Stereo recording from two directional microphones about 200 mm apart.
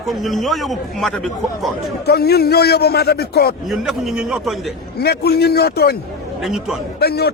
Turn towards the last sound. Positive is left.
turn(degrees=50)  # may be behind; listen again after turning